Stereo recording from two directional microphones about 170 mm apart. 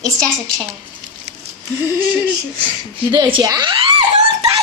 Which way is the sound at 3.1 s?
25° right (ahead or behind).